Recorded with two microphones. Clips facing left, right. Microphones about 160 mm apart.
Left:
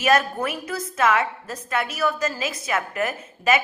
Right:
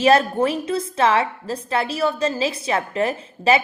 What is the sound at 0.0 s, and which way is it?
A woman's voice, 30° right (ahead or behind).